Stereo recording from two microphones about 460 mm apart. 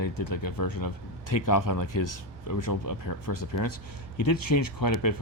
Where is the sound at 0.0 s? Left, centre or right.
Left.